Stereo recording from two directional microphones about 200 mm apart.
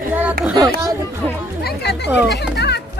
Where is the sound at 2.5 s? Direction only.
55° left (ahead or behind).